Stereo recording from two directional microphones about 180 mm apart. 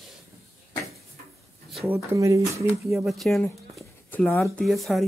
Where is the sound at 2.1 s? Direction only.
15° right (ahead or behind).